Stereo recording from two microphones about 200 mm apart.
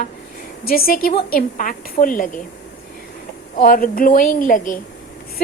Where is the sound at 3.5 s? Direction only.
45° left (ahead or behind).